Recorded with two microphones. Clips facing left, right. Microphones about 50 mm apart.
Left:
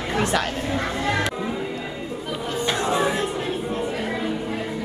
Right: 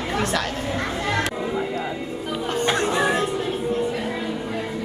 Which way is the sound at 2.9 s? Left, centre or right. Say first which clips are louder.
Right 1 dB; right.